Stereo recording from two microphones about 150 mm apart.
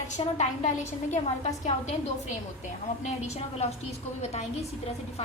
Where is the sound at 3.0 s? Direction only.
45° left (ahead or behind).